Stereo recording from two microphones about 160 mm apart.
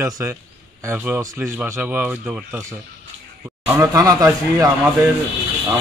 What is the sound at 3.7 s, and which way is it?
Speech, 20° right (ahead or behind).